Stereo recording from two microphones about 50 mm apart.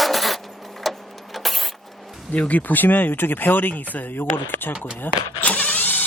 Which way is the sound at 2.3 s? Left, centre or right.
Left.